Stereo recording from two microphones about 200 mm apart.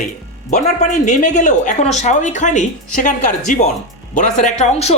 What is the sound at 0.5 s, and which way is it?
Speech, 35° left (ahead or behind).